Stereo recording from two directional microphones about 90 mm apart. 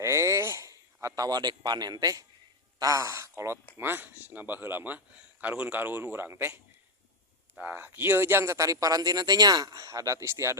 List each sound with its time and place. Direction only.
0.0 s a sound: 35° right (ahead or behind)
2.7 s speech: 40° right (ahead or behind)
7.6 s speech: 20° right (ahead or behind)